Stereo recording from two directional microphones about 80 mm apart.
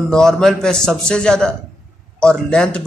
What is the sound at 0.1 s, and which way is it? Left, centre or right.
Speech, centre.